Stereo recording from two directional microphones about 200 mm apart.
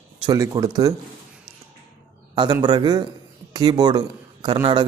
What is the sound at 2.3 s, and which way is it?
A man's voice, 20° right (ahead or behind).